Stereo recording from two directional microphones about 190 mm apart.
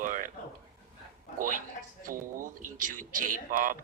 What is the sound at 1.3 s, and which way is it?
A man's voice, 45° right (ahead or behind).